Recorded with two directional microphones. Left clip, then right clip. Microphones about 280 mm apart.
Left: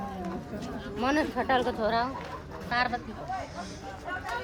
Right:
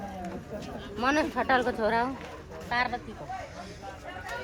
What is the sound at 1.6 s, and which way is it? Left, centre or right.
Speech, right.